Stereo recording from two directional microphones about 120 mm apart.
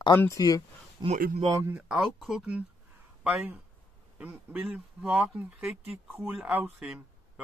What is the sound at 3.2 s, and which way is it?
A man's voice, 15° right (ahead or behind).